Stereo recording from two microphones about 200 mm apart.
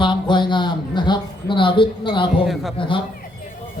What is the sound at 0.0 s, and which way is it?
A man's voice, 25° left (ahead or behind).